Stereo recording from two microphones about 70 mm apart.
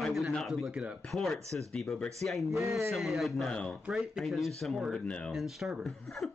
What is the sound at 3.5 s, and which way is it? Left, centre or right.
Speech, centre.